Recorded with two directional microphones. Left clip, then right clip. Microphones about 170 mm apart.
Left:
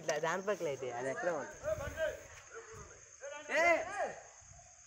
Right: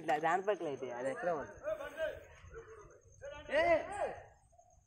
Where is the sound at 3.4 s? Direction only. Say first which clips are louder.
Left 1 dB; 25° left (ahead or behind).